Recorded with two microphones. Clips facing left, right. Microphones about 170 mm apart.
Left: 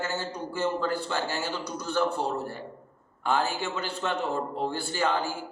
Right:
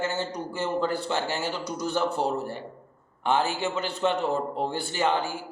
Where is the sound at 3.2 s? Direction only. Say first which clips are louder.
Right 2 dB; 20° right (ahead or behind).